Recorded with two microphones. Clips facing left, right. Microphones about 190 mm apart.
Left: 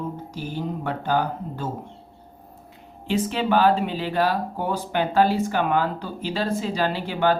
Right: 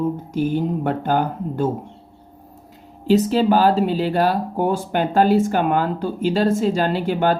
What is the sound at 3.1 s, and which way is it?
Speech, 40° right (ahead or behind).